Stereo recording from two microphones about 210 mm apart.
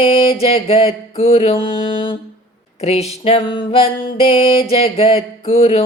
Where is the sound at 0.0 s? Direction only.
25° left (ahead or behind).